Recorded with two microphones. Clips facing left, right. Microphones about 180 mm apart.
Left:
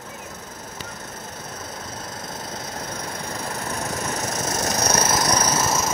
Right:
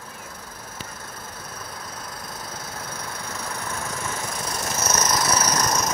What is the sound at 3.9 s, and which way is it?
Vehicle, 40° left (ahead or behind).